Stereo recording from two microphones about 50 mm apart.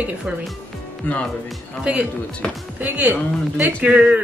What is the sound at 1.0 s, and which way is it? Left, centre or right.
Speech, left.